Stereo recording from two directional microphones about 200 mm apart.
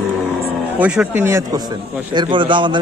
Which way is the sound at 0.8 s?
5° right (ahead or behind).